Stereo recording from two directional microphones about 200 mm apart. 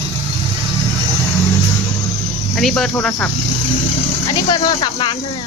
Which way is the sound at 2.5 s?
Centre (ahead or behind).